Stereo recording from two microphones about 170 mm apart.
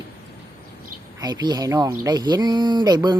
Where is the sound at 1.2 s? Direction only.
25° right (ahead or behind).